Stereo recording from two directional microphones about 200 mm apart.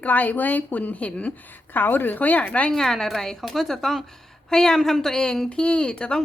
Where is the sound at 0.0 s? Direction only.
10° left (ahead or behind).